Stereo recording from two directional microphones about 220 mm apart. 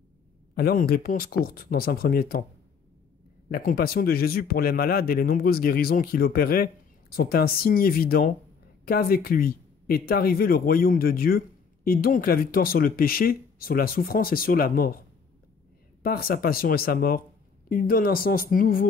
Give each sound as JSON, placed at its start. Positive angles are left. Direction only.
{"t": 0.6, "sound": "a man's voice", "side_deg": 45}
{"t": 3.4, "sound": "a man's voice", "side_deg": 45}
{"t": 16.0, "sound": "a man's voice", "side_deg": 45}